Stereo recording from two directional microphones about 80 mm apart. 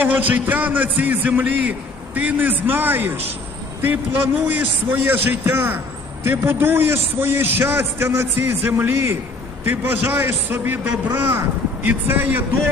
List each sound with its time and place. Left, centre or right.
0.0 s a man's voice: right